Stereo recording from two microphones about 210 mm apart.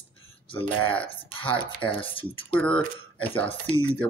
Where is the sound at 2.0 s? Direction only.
25° left (ahead or behind).